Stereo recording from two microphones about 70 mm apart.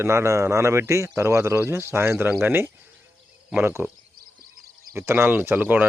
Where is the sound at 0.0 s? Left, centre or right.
Right.